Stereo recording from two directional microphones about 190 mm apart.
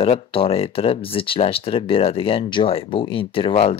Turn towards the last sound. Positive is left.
turn(degrees=30)  # may be behind; listen again after turning